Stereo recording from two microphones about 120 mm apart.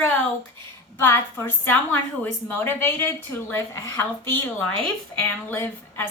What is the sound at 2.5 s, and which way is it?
Speech, 20° left (ahead or behind).